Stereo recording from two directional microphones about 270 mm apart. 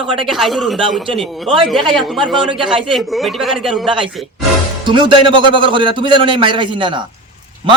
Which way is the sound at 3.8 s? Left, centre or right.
Centre.